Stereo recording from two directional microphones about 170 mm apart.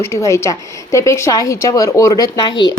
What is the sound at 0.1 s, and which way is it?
A woman's voice, 15° left (ahead or behind).